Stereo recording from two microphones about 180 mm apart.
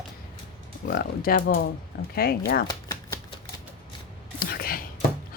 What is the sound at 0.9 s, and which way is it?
Speech, 55° left (ahead or behind).